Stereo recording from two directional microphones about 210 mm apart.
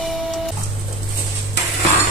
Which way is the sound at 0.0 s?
Centre (ahead or behind).